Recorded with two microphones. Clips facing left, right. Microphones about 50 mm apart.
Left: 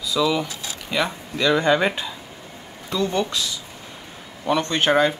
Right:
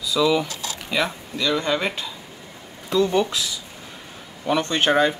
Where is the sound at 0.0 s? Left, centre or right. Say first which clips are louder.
Right 1 dB; centre.